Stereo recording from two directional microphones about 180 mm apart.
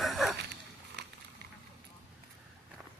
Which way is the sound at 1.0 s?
70° right (ahead or behind).